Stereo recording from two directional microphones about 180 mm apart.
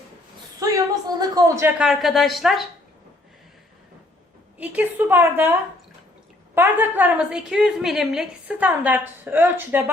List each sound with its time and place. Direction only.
0.6 s a woman's voice: 20° right (ahead or behind)
1.8 s speech: centre (ahead or behind)
4.5 s a woman's voice: 10° right (ahead or behind)